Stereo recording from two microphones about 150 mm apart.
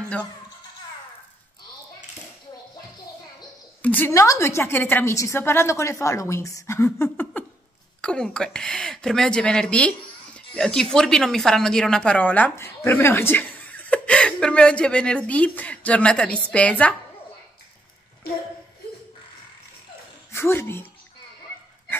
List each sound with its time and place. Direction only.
3.8 s a woman's voice: 10° left (ahead or behind)
20.3 s speech: 15° left (ahead or behind)